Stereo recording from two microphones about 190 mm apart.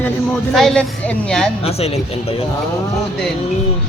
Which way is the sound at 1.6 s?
35° left (ahead or behind).